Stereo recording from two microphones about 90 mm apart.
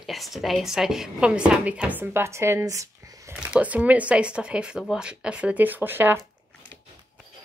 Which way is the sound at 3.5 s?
15° right (ahead or behind).